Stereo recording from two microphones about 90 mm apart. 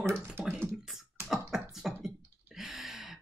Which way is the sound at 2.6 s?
5° right (ahead or behind).